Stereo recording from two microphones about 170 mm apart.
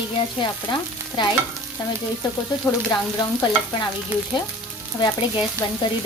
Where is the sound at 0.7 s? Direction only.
25° left (ahead or behind).